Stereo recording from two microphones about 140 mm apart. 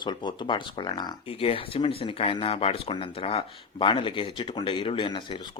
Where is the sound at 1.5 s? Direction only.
45° left (ahead or behind).